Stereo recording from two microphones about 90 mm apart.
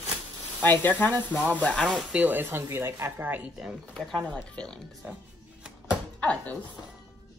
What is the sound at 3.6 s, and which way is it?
Speech, 5° right (ahead or behind).